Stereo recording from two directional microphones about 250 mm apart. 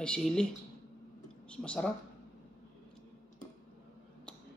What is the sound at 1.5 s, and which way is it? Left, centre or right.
Speech, centre.